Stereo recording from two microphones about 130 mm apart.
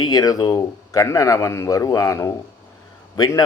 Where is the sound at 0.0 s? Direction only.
30° left (ahead or behind).